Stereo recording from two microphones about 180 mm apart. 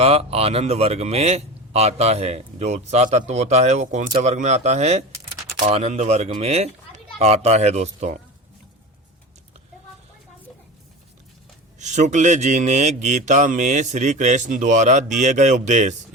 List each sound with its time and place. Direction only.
0.0 s a man's voice: 35° right (ahead or behind)
11.8 s a man's voice: 40° right (ahead or behind)